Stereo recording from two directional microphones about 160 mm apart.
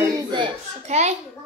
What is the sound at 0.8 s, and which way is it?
Speech, 45° right (ahead or behind).